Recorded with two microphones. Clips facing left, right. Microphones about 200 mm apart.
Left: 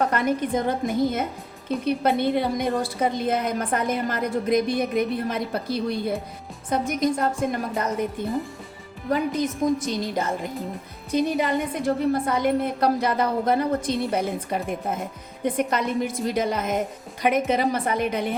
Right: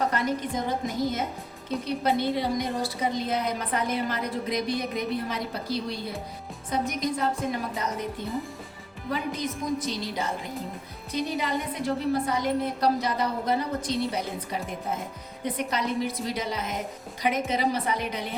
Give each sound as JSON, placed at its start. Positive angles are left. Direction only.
{"t": 0.1, "sound": "a woman's voice", "side_deg": 55}
{"t": 9.0, "sound": "a woman's voice", "side_deg": 45}